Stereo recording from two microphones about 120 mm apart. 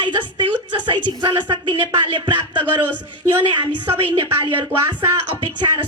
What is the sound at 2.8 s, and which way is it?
Speech, 15° right (ahead or behind).